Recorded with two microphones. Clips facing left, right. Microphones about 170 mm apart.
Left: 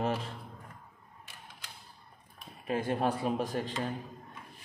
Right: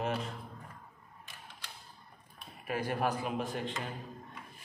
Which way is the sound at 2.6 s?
25° left (ahead or behind).